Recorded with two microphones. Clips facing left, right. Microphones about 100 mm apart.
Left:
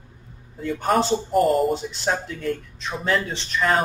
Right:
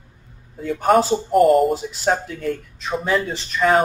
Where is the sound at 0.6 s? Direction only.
Centre (ahead or behind).